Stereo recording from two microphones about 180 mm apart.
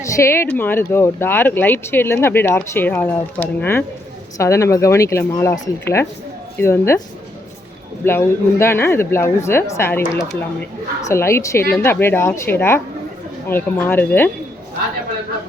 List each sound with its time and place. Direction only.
0.0 s speech: 15° left (ahead or behind)
8.0 s speech: 15° left (ahead or behind)